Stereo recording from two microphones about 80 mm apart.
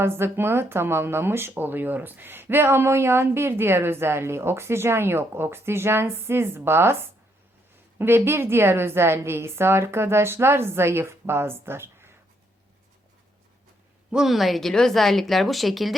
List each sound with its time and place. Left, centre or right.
0.0 s speech: right
14.1 s speech: centre